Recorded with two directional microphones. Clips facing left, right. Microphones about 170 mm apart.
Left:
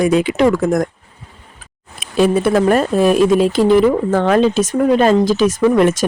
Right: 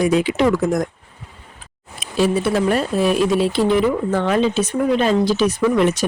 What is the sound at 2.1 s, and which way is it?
Speech, 55° left (ahead or behind).